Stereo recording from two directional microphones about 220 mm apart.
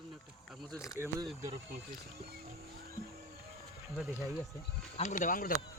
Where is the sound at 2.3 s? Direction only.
45° right (ahead or behind).